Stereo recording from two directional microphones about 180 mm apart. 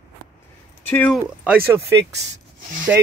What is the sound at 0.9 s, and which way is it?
Speech, 10° left (ahead or behind).